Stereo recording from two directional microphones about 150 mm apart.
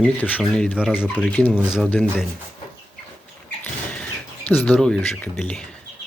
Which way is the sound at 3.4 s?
10° left (ahead or behind).